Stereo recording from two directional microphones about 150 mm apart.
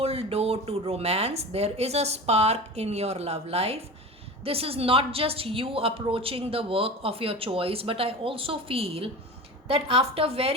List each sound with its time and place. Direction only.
0.0 s a woman's voice: 40° right (ahead or behind)